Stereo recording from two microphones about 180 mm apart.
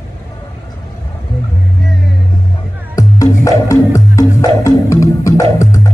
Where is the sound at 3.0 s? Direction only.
15° left (ahead or behind).